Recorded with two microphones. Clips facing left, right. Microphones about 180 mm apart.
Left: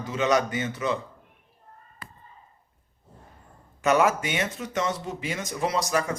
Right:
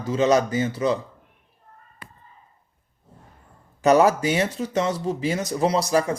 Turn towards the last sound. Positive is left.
turn(degrees=-35)  # may be behind; listen again after turning